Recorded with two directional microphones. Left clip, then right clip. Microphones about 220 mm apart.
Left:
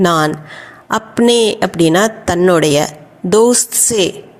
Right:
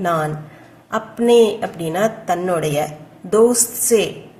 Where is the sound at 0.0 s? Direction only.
40° left (ahead or behind).